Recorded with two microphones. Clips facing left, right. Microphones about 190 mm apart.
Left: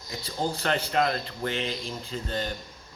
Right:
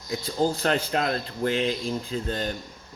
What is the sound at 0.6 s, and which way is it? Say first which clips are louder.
Speech: right 1 dB; 40° right (ahead or behind).